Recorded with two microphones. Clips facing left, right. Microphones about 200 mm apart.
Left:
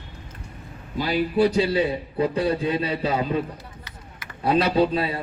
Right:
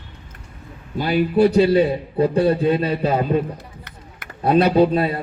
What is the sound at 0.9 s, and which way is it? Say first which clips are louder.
A man's voice: right 4 dB; 55° right (ahead or behind).